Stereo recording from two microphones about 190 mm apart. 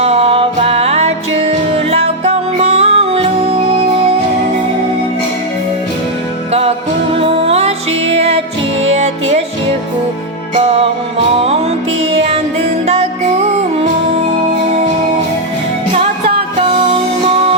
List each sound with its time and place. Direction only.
0.0 s music: 30° right (ahead or behind)
6.5 s music: 30° right (ahead or behind)
10.6 s music: 30° right (ahead or behind)